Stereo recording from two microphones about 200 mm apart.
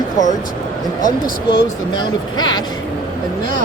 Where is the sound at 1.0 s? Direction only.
45° left (ahead or behind).